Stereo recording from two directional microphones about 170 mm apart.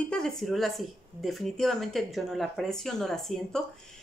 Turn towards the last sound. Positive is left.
turn(degrees=0)  # may be behind; listen again after turning